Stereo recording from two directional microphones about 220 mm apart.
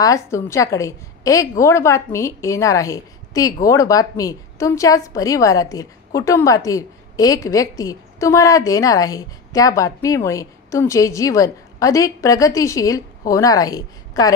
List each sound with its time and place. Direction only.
0.0 s a woman's voice: 15° left (ahead or behind)